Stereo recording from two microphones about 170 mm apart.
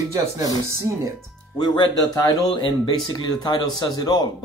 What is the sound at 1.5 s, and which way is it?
Speech, 25° left (ahead or behind).